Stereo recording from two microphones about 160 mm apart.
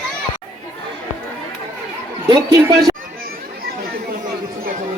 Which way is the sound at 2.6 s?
25° right (ahead or behind).